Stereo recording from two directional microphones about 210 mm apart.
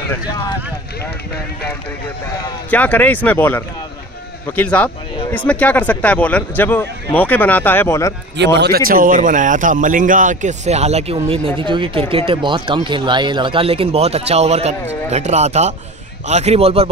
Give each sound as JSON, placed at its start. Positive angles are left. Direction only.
{"t": 2.2, "sound": "speech", "side_deg": 10}
{"t": 8.5, "sound": "a man's voice", "side_deg": -50}